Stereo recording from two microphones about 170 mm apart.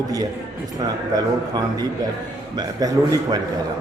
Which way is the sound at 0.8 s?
20° right (ahead or behind).